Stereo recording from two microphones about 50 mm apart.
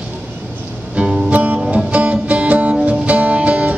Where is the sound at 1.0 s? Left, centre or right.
Right.